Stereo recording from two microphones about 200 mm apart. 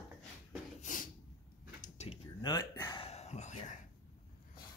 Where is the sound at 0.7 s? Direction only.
40° left (ahead or behind).